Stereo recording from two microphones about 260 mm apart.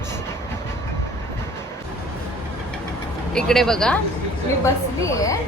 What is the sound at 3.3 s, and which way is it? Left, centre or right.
Speech, centre.